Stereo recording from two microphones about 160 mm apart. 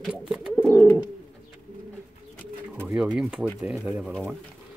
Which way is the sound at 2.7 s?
15° right (ahead or behind).